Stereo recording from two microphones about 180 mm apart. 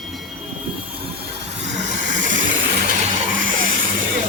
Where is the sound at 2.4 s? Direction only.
90° right.